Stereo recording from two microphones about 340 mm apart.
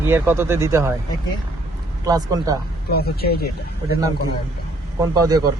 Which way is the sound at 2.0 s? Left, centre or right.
Centre.